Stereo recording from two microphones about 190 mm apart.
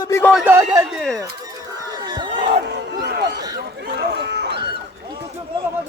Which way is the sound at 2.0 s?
25° right (ahead or behind).